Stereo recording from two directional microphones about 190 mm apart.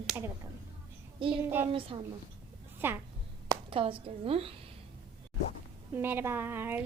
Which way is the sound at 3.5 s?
30° right (ahead or behind).